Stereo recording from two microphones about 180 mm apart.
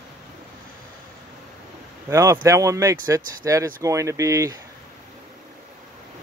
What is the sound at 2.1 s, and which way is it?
Speech, 15° right (ahead or behind).